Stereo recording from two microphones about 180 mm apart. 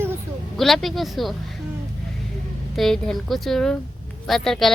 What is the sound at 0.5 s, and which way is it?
Speech, centre (ahead or behind).